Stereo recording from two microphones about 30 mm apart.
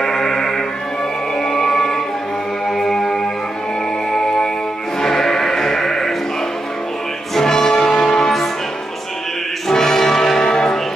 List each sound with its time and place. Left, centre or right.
0.0 s music: centre
7.3 s music: centre
7.9 s church bell: centre
9.7 s brass instrument: centre